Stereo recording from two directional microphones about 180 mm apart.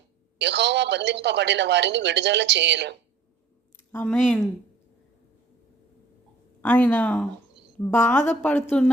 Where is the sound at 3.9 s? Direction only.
10° left (ahead or behind).